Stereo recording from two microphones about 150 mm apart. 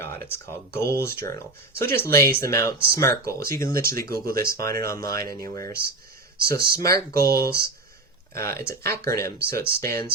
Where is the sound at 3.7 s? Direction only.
75° right (ahead or behind).